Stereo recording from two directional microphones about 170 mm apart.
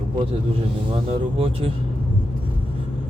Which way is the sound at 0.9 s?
35° right (ahead or behind).